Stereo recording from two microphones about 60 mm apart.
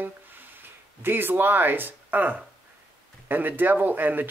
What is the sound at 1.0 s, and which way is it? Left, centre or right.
Speech, right.